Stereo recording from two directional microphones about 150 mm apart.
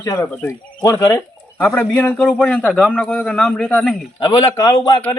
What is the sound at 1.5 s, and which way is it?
A man's voice, 10° left (ahead or behind).